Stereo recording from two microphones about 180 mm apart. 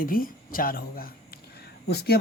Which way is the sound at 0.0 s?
50° left (ahead or behind).